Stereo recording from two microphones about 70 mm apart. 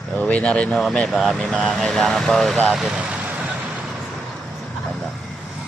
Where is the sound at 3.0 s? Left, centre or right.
Centre.